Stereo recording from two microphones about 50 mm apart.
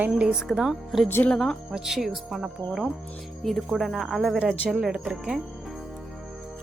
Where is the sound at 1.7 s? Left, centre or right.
Centre.